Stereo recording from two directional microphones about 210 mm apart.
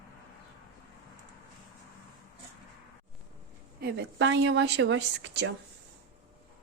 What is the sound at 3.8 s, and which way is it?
A woman's voice, 50° right (ahead or behind).